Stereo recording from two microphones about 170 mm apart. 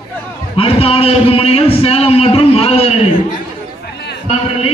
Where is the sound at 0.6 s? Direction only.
35° left (ahead or behind).